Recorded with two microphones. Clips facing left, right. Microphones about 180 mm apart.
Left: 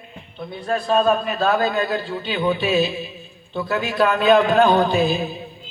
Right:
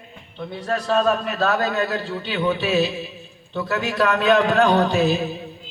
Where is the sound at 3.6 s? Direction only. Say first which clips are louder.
Left 2 dB; 75° right (ahead or behind).